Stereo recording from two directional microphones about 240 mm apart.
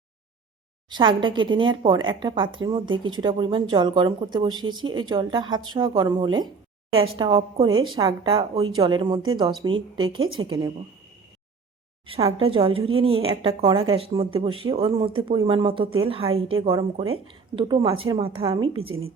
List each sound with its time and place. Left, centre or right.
0.9 s speech: centre
12.0 s speech: right